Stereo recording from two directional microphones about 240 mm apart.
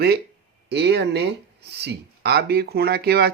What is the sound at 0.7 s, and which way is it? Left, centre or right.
Speech, right.